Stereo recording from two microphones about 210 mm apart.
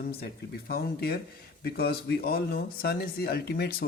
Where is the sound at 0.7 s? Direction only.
50° left (ahead or behind).